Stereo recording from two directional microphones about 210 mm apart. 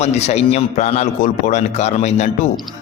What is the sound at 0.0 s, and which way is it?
Speech, 30° left (ahead or behind).